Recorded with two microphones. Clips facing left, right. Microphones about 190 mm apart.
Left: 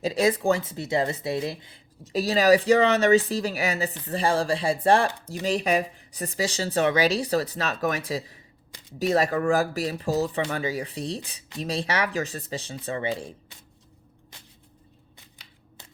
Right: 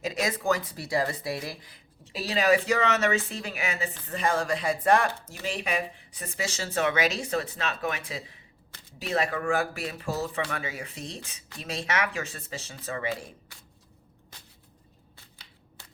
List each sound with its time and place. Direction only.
0.0 s speech: 30° left (ahead or behind)
2.0 s speech: 40° left (ahead or behind)